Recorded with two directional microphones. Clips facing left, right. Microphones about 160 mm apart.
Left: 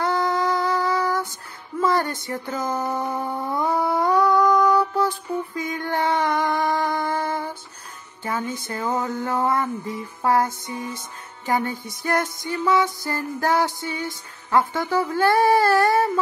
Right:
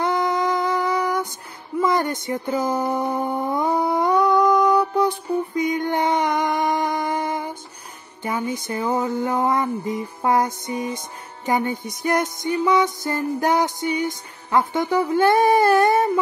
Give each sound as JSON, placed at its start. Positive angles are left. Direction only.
{"t": 0.0, "sound": "music", "side_deg": -20}
{"t": 1.8, "sound": "speech", "side_deg": -15}
{"t": 2.7, "sound": "a sound", "side_deg": -15}
{"t": 3.1, "sound": "humming", "side_deg": -20}
{"t": 8.2, "sound": "a sound", "side_deg": -15}
{"t": 11.4, "sound": "music", "side_deg": -20}